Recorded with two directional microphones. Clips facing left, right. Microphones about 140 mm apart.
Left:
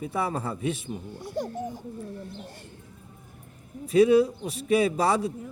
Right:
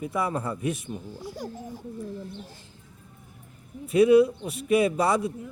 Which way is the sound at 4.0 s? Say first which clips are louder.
Right 1 dB; 35° left (ahead or behind).